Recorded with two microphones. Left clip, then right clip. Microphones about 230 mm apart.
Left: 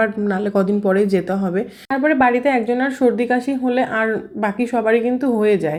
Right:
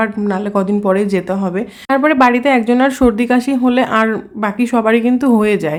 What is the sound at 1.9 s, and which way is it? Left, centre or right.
Speech, right.